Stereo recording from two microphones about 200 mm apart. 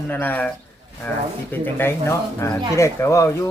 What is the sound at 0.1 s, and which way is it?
Speech, 10° left (ahead or behind).